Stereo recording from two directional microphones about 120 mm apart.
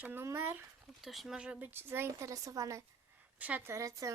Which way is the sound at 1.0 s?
Centre (ahead or behind).